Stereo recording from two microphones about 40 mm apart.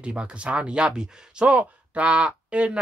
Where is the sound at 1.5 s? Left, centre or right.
Right.